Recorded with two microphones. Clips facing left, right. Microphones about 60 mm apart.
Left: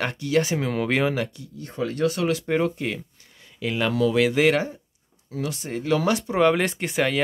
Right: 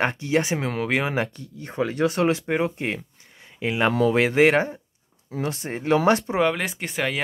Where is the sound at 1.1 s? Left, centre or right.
Right.